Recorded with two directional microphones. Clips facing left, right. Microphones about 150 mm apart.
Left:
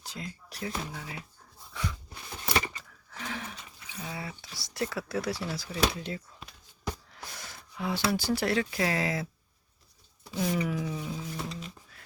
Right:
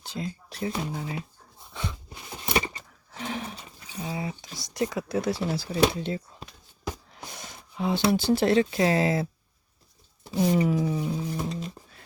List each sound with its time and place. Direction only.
0.0 s speech: 25° right (ahead or behind)
1.7 s a sound: 25° right (ahead or behind)
4.0 s speech: 25° right (ahead or behind)
10.2 s speech: 25° right (ahead or behind)